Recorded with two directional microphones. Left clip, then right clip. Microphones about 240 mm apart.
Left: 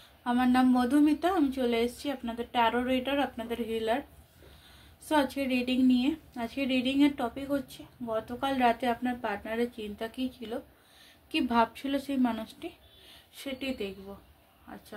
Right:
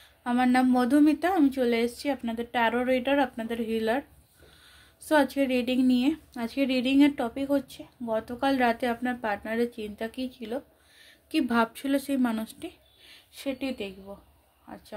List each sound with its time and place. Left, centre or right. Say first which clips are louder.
0.2 s a woman's voice: right 2 dB; right
5.0 s a woman's voice: right 4 dB; right